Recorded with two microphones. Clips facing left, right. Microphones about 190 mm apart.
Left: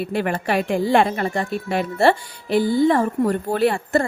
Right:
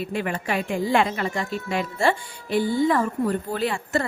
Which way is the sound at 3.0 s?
65° left (ahead or behind).